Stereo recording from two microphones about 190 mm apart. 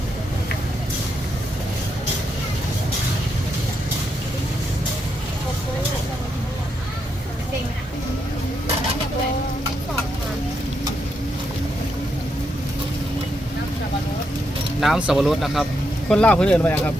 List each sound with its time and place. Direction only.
14.8 s speech: 5° right (ahead or behind)